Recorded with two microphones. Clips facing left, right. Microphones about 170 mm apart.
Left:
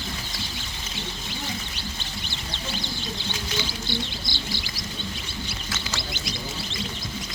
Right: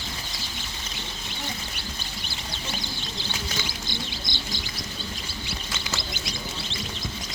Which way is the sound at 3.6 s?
15° right (ahead or behind).